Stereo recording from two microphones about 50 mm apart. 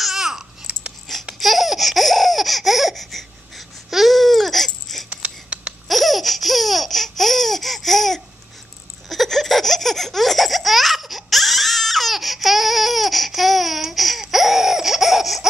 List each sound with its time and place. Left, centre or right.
0.0 s babbling: centre
1.1 s babbling: centre
1.4 s baby laughter: centre
5.1 s a sound: right
5.9 s laughter: centre